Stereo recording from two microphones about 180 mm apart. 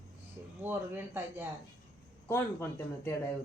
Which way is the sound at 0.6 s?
10° right (ahead or behind).